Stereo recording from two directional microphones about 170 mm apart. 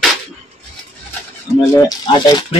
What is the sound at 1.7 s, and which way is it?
Speech, 25° left (ahead or behind).